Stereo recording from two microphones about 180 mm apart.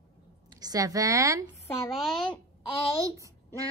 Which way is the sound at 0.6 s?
20° right (ahead or behind).